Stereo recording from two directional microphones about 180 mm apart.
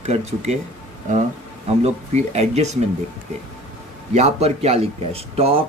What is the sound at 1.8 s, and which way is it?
Speech, 35° right (ahead or behind).